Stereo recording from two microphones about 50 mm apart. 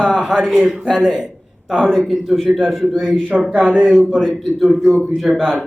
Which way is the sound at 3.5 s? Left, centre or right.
Right.